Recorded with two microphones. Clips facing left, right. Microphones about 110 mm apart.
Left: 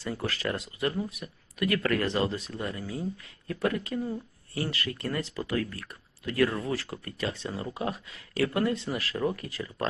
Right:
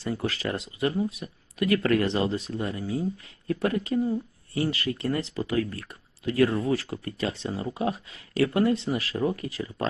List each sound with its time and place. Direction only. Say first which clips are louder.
0.0 s speech: right 3 dB; 25° right (ahead or behind)